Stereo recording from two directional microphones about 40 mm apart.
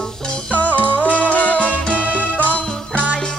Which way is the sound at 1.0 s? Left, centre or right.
Right.